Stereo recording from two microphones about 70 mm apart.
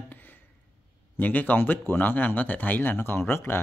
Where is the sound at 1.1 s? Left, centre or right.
Left.